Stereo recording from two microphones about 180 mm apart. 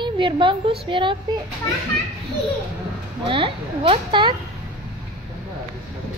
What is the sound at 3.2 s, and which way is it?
A woman's voice, 30° right (ahead or behind).